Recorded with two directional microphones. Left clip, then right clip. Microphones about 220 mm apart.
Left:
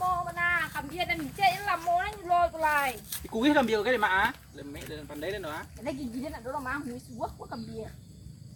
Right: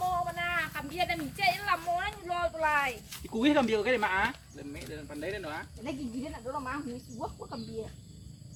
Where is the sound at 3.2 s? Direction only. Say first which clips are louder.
Left 2 dB; centre (ahead or behind).